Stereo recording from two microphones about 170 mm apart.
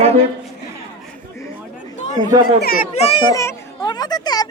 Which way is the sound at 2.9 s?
35° left (ahead or behind).